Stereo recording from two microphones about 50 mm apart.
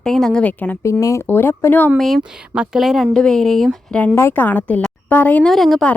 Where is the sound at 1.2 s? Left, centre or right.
Left.